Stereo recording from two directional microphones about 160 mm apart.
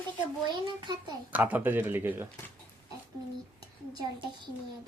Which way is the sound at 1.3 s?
10° right (ahead or behind).